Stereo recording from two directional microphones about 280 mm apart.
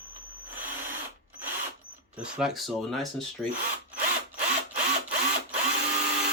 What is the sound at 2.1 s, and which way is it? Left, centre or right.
Speech, centre.